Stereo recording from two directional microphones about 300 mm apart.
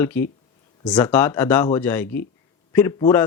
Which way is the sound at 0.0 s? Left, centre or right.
Centre.